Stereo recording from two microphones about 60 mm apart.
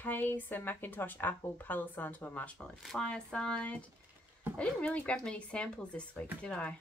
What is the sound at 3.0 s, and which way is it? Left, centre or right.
Speech, centre.